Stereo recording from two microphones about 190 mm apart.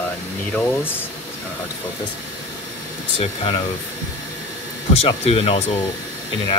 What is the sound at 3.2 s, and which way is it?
Speech, 30° left (ahead or behind).